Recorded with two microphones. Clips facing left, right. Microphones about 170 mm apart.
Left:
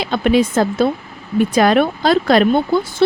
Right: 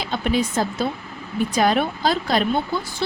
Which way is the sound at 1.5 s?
70° left (ahead or behind).